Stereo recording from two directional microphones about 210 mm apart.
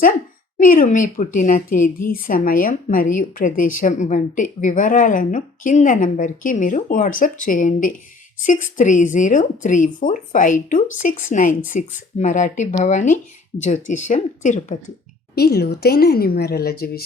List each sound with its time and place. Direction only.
0.6 s a woman's voice: 40° left (ahead or behind)
15.4 s a woman's voice: 50° left (ahead or behind)